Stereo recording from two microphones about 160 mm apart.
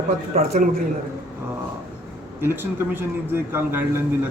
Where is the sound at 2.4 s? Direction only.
15° right (ahead or behind).